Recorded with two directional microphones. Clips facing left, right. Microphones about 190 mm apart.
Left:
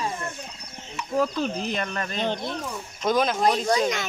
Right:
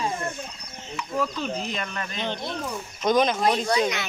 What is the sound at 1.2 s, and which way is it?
Speech, 40° left (ahead or behind).